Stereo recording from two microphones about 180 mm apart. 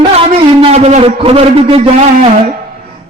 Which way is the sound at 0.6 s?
35° right (ahead or behind).